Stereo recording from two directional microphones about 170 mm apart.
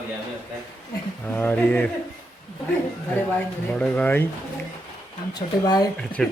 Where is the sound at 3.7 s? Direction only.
5° left (ahead or behind).